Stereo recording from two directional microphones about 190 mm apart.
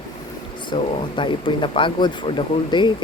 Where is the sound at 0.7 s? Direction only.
25° left (ahead or behind).